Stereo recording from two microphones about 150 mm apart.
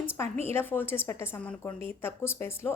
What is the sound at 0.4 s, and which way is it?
A woman's voice, 15° left (ahead or behind).